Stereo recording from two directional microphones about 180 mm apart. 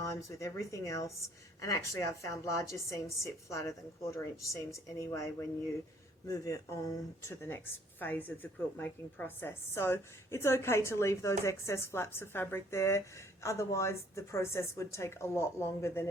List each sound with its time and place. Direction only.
0.0 s speech: 15° left (ahead or behind)